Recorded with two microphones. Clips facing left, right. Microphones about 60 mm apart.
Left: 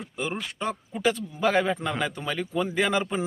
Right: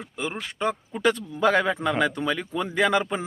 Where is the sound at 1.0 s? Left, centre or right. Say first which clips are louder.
Right 3 dB; right.